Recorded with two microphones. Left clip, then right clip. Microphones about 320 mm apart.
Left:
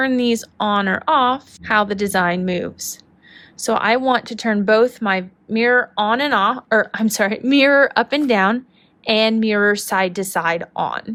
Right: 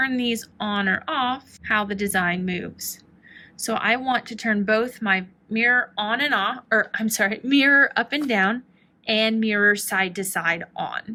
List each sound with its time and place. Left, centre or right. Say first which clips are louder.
0.0 s speech: left 5 dB; centre